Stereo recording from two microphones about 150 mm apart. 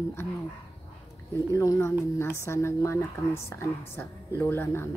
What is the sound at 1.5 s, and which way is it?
A woman's voice, 20° left (ahead or behind).